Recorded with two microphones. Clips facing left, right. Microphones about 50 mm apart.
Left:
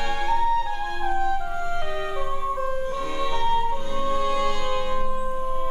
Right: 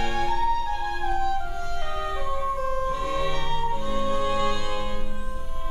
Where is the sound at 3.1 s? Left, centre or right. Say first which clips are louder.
Left 4 dB; centre.